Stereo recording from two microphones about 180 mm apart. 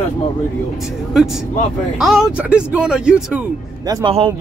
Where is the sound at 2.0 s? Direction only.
Centre (ahead or behind).